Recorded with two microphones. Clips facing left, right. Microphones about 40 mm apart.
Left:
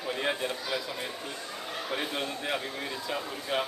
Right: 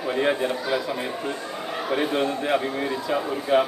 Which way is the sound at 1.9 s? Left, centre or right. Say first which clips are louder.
Right 10 dB; right.